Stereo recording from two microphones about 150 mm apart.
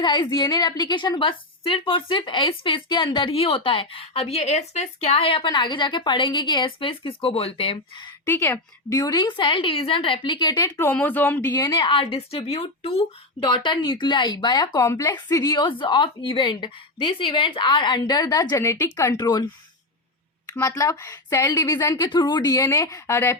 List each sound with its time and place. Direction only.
0.0 s a woman's voice: 30° left (ahead or behind)
8.2 s a woman's voice: 15° left (ahead or behind)
10.8 s speech: 10° left (ahead or behind)
11.6 s a woman's voice: 35° left (ahead or behind)
20.5 s a woman's voice: 20° left (ahead or behind)